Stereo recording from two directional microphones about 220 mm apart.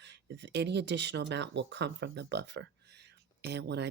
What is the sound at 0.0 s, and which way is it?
Speech, 50° right (ahead or behind).